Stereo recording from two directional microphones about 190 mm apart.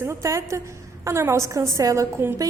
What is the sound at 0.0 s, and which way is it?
A woman's voice, 15° right (ahead or behind).